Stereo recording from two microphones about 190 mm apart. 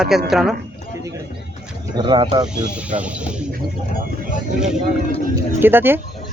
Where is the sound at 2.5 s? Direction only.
5° right (ahead or behind).